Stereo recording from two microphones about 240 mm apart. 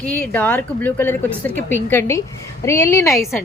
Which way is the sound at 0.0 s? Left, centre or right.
Centre.